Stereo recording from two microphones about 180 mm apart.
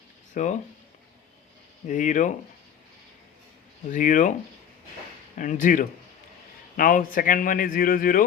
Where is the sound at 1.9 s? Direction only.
45° left (ahead or behind).